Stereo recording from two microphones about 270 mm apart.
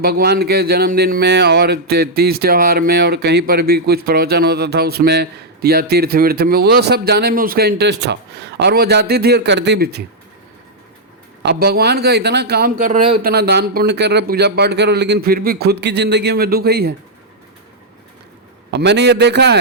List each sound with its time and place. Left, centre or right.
0.0 s speech: right
11.4 s speech: right
18.7 s speech: right